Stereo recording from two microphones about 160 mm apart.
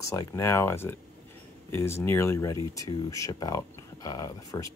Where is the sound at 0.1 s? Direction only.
20° left (ahead or behind).